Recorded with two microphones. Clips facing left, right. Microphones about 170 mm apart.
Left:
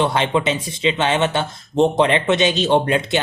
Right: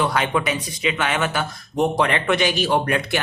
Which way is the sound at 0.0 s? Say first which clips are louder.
Left 3 dB; 25° left (ahead or behind).